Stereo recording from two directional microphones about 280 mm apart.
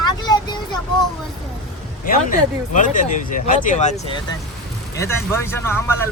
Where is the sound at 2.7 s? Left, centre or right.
Left.